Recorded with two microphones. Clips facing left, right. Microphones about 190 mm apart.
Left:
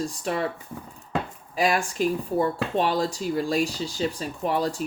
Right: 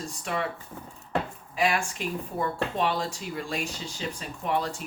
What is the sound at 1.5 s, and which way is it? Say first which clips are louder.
Speech: left 3 dB; 35° left (ahead or behind).